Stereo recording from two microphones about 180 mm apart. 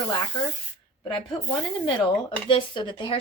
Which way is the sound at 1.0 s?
25° left (ahead or behind).